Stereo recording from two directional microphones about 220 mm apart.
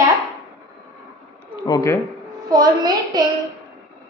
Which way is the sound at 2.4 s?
20° right (ahead or behind).